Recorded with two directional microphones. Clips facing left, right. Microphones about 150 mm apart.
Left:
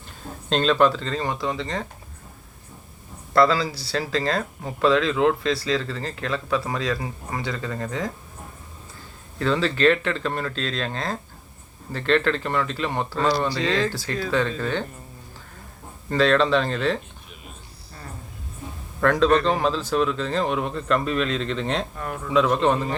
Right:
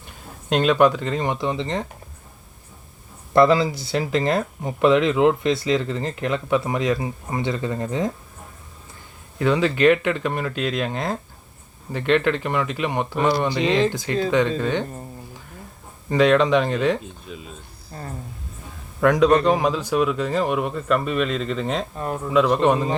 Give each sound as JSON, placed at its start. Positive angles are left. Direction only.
{"t": 0.5, "sound": "speech", "side_deg": -15}
{"t": 3.3, "sound": "speech", "side_deg": -20}
{"t": 9.4, "sound": "speech", "side_deg": -15}
{"t": 16.0, "sound": "speech", "side_deg": -15}
{"t": 18.0, "sound": "a sound", "side_deg": -35}
{"t": 18.9, "sound": "speech", "side_deg": -15}
{"t": 21.9, "sound": "speech", "side_deg": -25}
{"t": 22.3, "sound": "speech", "side_deg": -5}